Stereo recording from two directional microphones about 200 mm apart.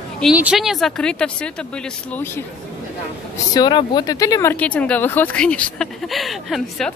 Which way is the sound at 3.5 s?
20° left (ahead or behind).